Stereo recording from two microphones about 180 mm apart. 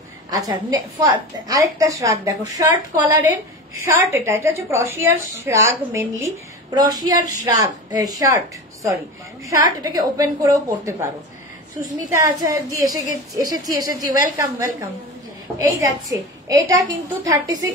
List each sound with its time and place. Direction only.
0.3 s a woman's voice: 20° right (ahead or behind)
9.5 s a woman's voice: 20° right (ahead or behind)
12.1 s a woman's voice: 15° right (ahead or behind)